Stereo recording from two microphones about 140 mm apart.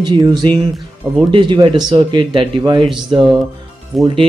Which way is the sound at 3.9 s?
Centre (ahead or behind).